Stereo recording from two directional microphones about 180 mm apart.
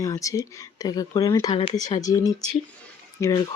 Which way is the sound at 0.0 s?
20° left (ahead or behind).